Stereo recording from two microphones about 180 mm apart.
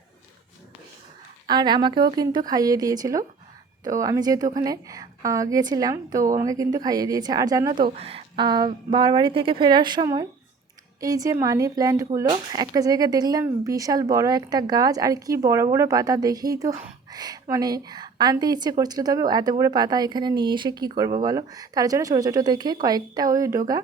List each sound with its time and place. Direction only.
1.5 s speech: 25° right (ahead or behind)
7.9 s speech: 35° right (ahead or behind)